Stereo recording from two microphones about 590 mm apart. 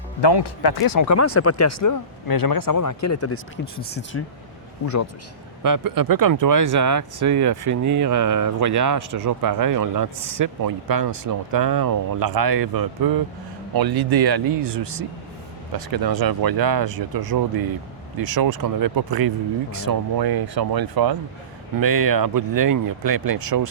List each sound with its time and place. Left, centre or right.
0.2 s speech: left; by 4.2 s centre
5.6 s speech: right